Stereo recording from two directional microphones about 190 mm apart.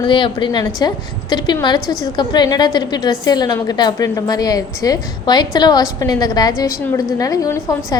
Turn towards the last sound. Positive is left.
turn(degrees=20)  # may be behind; listen again after turning